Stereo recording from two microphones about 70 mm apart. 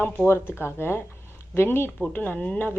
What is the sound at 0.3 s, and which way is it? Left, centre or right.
A woman's voice, left.